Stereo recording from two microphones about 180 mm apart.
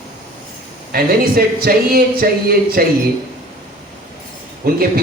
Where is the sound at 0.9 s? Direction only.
55° right (ahead or behind).